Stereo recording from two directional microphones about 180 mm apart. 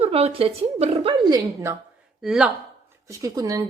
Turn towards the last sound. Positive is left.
turn(degrees=-20)  # may be behind; listen again after turning